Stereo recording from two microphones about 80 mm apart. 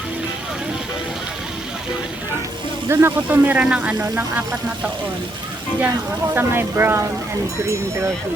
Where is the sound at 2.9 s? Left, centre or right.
Right.